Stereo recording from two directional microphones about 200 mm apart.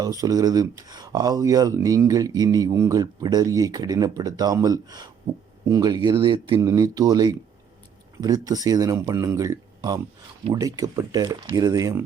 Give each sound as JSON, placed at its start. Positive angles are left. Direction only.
{"t": 0.0, "sound": "speech", "side_deg": -15}